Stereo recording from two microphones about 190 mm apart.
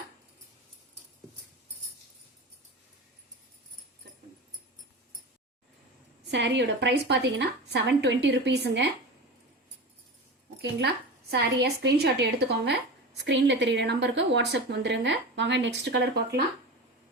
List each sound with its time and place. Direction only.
6.3 s a woman's voice: 65° right (ahead or behind)
10.6 s a woman's voice: 60° right (ahead or behind)